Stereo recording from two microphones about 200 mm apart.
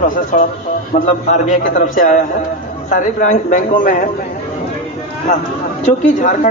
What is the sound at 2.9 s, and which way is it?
A man's voice, 40° left (ahead or behind).